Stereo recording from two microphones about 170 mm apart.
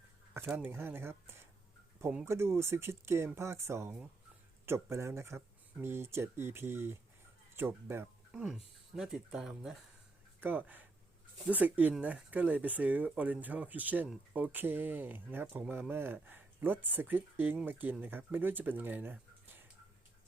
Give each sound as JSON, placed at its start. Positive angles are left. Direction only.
{"t": 0.3, "sound": "speech", "side_deg": -10}